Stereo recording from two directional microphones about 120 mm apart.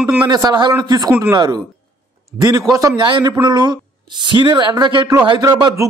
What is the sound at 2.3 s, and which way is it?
Speech, 5° right (ahead or behind).